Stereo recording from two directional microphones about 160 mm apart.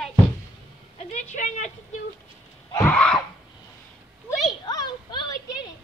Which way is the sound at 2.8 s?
5° left (ahead or behind).